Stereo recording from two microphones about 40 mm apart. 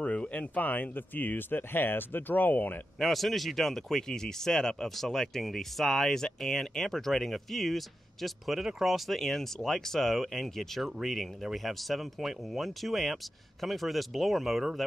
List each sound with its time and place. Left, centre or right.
0.0 s speech: left
1.6 s speech: left
3.0 s speech: centre